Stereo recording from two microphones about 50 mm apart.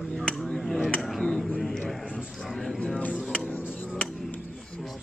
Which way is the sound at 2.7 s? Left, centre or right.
Centre.